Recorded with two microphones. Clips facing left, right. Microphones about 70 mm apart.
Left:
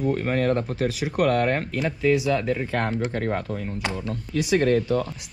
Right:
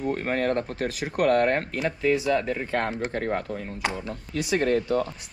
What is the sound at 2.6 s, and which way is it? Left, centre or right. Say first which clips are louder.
Speech: left 1 dB; centre.